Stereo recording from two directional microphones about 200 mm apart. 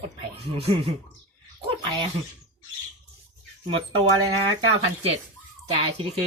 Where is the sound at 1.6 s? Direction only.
30° right (ahead or behind).